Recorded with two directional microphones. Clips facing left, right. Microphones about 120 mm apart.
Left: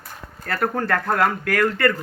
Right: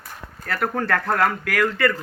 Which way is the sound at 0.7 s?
30° left (ahead or behind).